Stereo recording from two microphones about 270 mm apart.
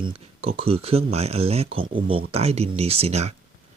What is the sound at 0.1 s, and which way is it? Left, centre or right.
Speech, right.